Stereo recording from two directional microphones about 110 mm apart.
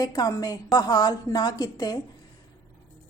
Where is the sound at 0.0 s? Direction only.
35° left (ahead or behind).